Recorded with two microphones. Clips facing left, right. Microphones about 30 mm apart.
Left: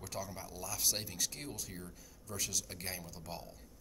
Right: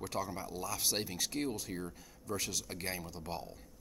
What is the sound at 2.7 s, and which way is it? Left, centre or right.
Speech, centre.